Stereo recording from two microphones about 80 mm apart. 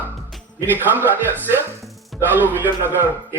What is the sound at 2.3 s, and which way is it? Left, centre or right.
Speech, right.